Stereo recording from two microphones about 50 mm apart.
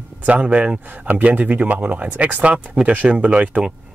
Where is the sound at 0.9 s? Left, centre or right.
Right.